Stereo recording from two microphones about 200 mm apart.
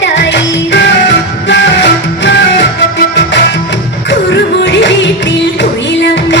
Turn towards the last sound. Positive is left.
turn(degrees=60)  # may be behind; listen again after turning